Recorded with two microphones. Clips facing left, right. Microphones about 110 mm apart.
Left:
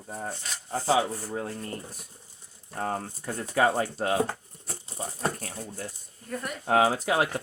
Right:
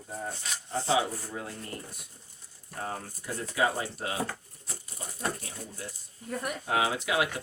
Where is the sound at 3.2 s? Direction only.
50° left (ahead or behind).